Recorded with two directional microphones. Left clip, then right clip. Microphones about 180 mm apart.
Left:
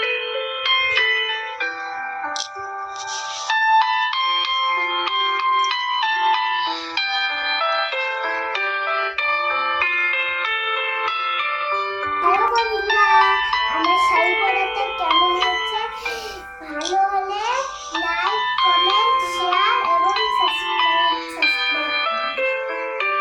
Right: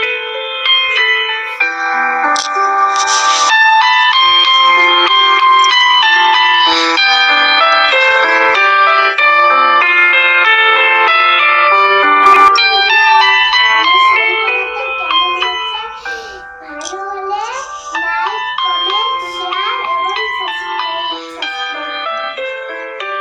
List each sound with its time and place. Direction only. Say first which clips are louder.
0.6 s music: right 7 dB; 50° right (ahead or behind); by 12.5 s 65° right (ahead or behind)
12.5 s music: right 9 dB; 30° right (ahead or behind)
15.1 s ice cream truck: right 4 dB; 20° right (ahead or behind)
18.6 s music: right 2 dB; 20° right (ahead or behind)